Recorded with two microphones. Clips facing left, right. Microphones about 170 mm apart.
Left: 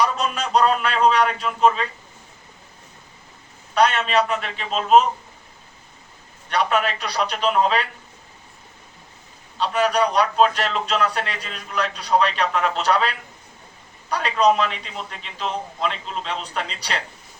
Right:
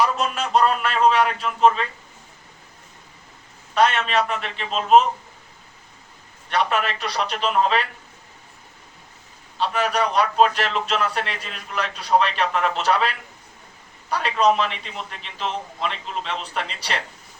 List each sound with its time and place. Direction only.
0.0 s a man's voice: centre (ahead or behind)
3.8 s a man's voice: centre (ahead or behind)
6.5 s a man's voice: centre (ahead or behind)
9.6 s a man's voice: centre (ahead or behind)